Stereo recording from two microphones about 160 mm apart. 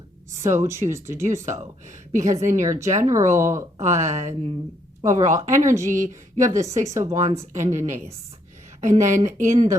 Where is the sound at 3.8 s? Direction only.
50° right (ahead or behind).